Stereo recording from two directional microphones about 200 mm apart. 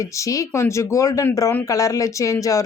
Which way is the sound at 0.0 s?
15° left (ahead or behind).